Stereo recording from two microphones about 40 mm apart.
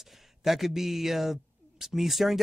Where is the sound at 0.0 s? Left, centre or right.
Centre.